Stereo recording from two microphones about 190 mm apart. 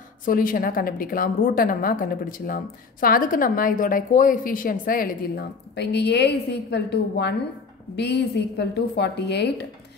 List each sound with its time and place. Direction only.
0.2 s a woman's voice: 50° left (ahead or behind)